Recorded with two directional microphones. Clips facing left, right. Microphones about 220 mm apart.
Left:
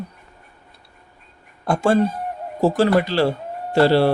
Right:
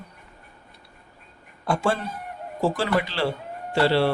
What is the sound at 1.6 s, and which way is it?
A man's voice, 45° left (ahead or behind).